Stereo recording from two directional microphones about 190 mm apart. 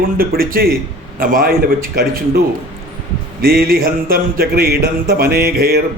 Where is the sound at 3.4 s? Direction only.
50° right (ahead or behind).